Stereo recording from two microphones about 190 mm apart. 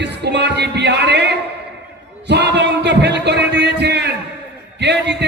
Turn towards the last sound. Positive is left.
turn(degrees=-65)  # may be behind; listen again after turning